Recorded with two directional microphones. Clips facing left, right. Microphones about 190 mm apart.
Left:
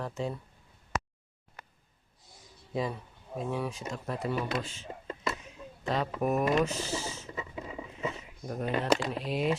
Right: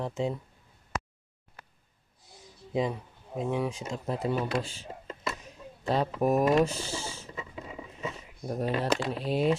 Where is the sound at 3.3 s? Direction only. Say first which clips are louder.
Right 3 dB; 15° right (ahead or behind); by 4.8 s 30° right (ahead or behind).